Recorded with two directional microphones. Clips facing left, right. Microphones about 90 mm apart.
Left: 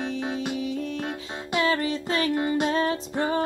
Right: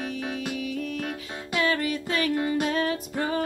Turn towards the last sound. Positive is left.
turn(degrees=30)  # may be behind; listen again after turning